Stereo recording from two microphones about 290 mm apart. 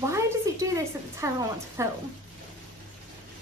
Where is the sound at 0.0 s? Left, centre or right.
Centre.